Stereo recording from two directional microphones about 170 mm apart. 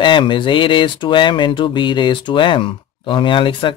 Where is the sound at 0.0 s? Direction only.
30° left (ahead or behind).